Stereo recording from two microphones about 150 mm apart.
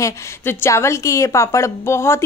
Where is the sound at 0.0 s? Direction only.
20° left (ahead or behind).